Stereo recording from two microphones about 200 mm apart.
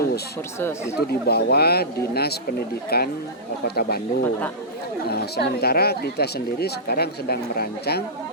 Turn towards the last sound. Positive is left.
turn(degrees=50)  # may be behind; listen again after turning